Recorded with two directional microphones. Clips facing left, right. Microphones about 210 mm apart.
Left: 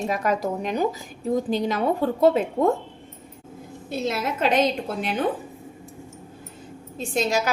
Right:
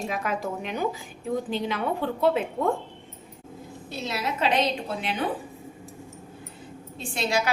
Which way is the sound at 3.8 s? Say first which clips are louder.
Left 5 dB; 50° left (ahead or behind).